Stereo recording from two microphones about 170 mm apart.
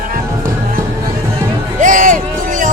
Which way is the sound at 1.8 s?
50° right (ahead or behind).